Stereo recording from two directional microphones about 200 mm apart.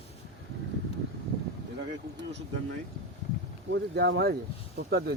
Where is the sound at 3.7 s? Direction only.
60° right (ahead or behind).